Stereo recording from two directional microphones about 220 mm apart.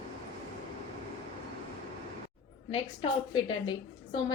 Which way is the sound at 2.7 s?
20° left (ahead or behind).